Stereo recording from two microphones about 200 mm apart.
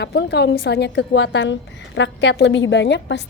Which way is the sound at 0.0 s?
60° left (ahead or behind).